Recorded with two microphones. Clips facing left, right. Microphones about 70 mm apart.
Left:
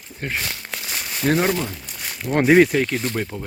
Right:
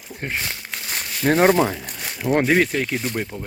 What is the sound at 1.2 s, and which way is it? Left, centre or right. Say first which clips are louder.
Speech: right 4 dB; right.